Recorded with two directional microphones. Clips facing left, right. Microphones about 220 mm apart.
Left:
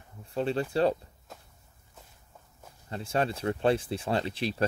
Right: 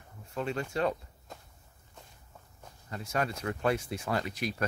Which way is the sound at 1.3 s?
Centre (ahead or behind).